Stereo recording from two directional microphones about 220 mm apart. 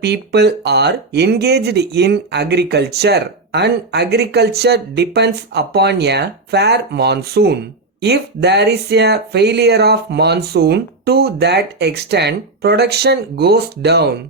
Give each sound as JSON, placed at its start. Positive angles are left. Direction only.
{"t": 0.0, "sound": "speech", "side_deg": -50}